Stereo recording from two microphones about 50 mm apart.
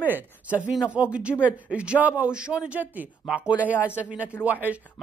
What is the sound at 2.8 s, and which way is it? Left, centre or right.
Speech, right.